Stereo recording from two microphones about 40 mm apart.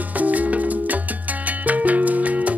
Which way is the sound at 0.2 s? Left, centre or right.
Right.